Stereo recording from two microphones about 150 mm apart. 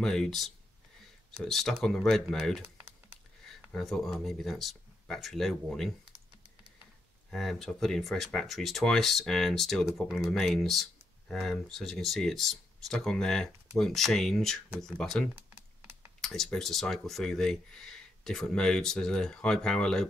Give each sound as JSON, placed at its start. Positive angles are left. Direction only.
{"t": 0.0, "sound": "speech", "side_deg": 0}
{"t": 3.7, "sound": "speech", "side_deg": 0}
{"t": 7.2, "sound": "speech", "side_deg": 0}